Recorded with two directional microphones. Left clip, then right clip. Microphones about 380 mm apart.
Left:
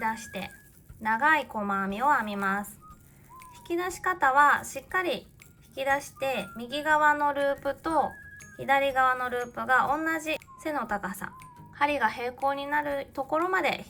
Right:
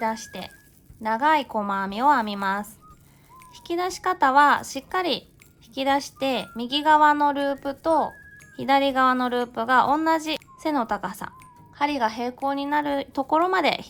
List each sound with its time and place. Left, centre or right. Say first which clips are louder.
0.0 s speech: right 3 dB; centre
4.0 s speech: right 4 dB; centre